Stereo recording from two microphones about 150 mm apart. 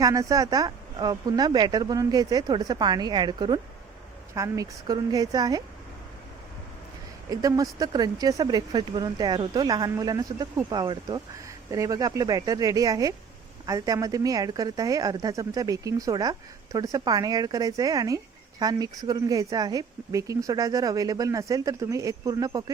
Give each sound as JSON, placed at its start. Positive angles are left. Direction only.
{"t": 0.0, "sound": "speech", "side_deg": -20}
{"t": 7.3, "sound": "speech", "side_deg": -25}